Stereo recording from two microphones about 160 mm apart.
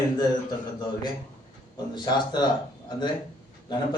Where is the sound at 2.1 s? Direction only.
25° left (ahead or behind).